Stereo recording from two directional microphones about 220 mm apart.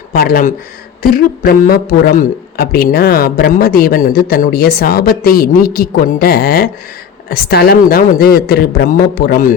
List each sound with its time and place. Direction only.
0.1 s a man's voice: 40° left (ahead or behind)